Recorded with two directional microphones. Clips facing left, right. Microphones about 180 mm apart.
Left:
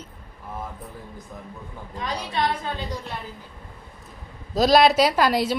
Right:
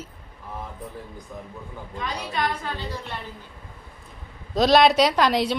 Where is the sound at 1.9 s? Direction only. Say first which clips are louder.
Left 2 dB; 30° left (ahead or behind).